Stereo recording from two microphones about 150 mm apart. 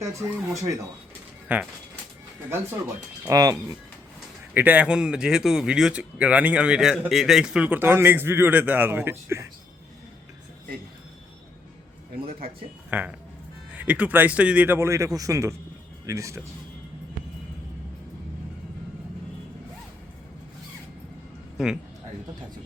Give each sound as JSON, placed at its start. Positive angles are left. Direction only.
{"t": 0.0, "sound": "speech", "side_deg": -20}
{"t": 1.5, "sound": "speech", "side_deg": -10}
{"t": 3.2, "sound": "speech", "side_deg": -20}
{"t": 4.5, "sound": "speech", "side_deg": -10}
{"t": 12.9, "sound": "speech", "side_deg": -10}